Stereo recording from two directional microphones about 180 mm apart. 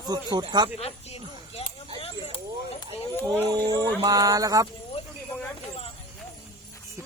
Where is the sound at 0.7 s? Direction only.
35° left (ahead or behind).